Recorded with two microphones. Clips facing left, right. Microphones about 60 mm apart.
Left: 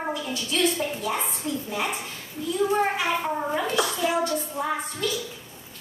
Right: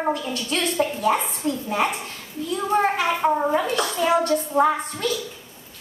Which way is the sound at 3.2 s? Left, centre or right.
Right.